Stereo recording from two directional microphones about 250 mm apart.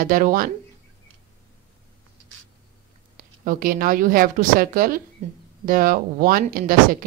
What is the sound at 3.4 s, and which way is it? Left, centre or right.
Speech, right.